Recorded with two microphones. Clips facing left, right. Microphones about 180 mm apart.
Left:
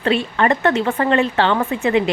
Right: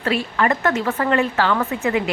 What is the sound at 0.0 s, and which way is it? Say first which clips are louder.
A woman's voice: left 3 dB; 30° left (ahead or behind).